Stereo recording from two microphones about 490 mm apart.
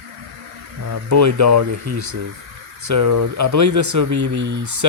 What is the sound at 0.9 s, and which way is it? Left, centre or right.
Speech, right.